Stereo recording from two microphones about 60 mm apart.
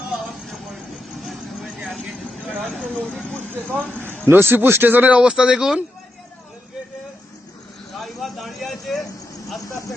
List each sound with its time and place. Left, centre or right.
0.3 s vehicle: centre
2.6 s speech: centre
3.5 s speech: right
5.2 s speech: centre
8.0 s a sound: centre